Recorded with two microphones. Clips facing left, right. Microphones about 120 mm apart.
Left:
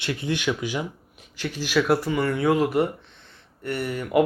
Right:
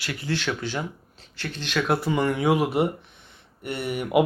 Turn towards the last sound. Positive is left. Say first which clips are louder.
# even
turn(degrees=-20)  # may be behind; listen again after turning